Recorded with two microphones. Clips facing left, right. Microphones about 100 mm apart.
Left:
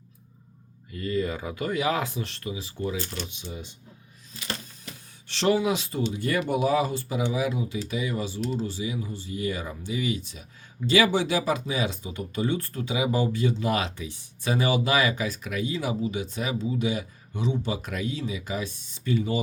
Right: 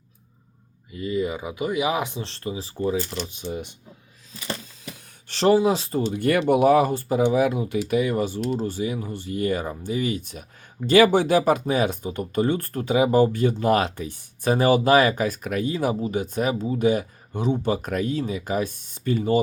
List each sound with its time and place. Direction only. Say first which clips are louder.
0.9 s speech: right 2 dB; 15° right (ahead or behind); by 3.5 s 35° right (ahead or behind)
3.5 s speech: right 8 dB; 65° right (ahead or behind)
5.3 s speech: right 5 dB; 40° right (ahead or behind)
6.1 s speech: right 8 dB; 60° right (ahead or behind)